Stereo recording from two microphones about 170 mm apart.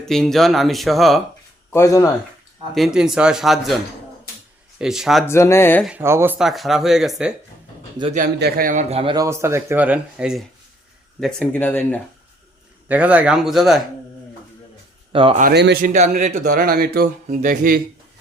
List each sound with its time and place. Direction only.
0.0 s speech: centre (ahead or behind)
1.7 s speech: 20° left (ahead or behind)
2.7 s speech: centre (ahead or behind)
4.8 s speech: 5° right (ahead or behind)
5.2 s speech: 15° left (ahead or behind)
5.8 s speech: 10° right (ahead or behind)
6.4 s speech: centre (ahead or behind)
8.4 s a man's voice: 65° right (ahead or behind); by 9.1 s 35° right (ahead or behind)
9.1 s speech: 15° right (ahead or behind); by 11.9 s 10° left (ahead or behind)
12.9 s speech: 10° right (ahead or behind)
15.1 s speech: 30° right (ahead or behind)
15.5 s a man's voice: 80° right
15.8 s a man's voice: 50° right (ahead or behind)
16.4 s speech: 60° right (ahead or behind)